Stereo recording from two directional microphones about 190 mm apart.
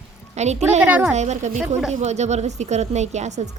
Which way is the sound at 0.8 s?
10° right (ahead or behind).